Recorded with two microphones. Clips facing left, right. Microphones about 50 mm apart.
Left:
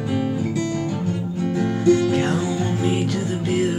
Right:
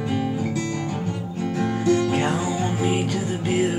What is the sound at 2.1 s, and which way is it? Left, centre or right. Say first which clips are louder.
Music: left 2 dB; centre.